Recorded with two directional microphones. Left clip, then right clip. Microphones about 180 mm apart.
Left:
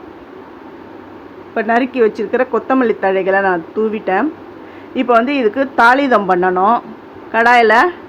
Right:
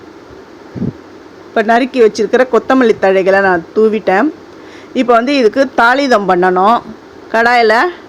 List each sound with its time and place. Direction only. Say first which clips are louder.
1.5 s speech: right 4 dB; 30° right (ahead or behind)